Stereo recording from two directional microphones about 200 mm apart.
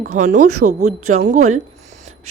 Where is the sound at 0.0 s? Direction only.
40° right (ahead or behind).